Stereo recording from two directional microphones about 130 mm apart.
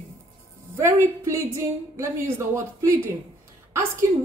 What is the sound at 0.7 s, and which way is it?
A woman's voice, 20° right (ahead or behind).